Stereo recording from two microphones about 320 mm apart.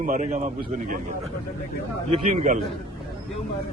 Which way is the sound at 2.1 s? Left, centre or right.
Right.